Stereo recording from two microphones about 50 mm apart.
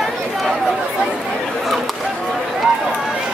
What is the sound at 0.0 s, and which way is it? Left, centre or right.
Chatter, centre.